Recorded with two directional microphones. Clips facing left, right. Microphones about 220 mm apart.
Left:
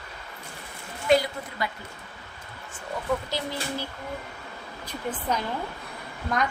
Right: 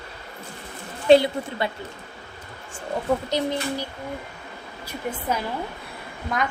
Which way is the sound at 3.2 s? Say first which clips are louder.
Right 7 dB; 20° right (ahead or behind).